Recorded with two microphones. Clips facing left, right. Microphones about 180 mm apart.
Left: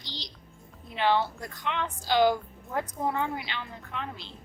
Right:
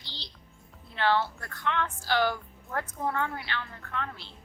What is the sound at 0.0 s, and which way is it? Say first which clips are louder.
Music: left 5 dB; 15° left (ahead or behind).